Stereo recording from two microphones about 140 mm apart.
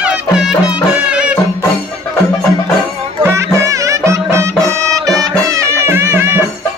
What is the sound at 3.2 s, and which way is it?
Music, 20° right (ahead or behind).